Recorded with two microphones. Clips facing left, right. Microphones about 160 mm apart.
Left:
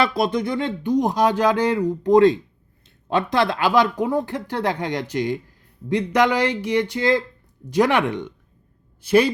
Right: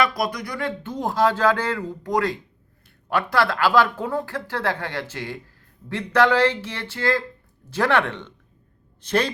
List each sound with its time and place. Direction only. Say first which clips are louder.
0.0 s a man's voice: left 3 dB; 25° left (ahead or behind); by 9.3 s 10° left (ahead or behind)